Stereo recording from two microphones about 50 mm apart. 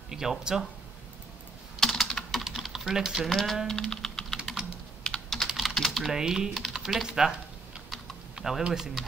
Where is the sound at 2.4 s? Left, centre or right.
Centre.